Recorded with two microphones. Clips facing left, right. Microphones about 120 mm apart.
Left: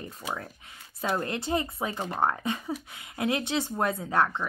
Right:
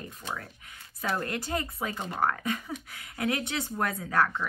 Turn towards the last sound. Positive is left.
turn(degrees=25)  # may be behind; listen again after turning